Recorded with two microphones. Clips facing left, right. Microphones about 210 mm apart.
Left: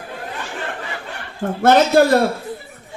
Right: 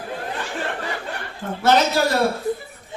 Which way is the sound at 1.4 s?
50° left (ahead or behind).